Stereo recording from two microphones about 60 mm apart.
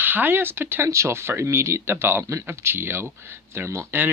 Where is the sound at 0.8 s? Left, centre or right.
Right.